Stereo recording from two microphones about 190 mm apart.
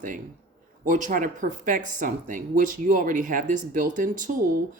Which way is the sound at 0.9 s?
40° right (ahead or behind).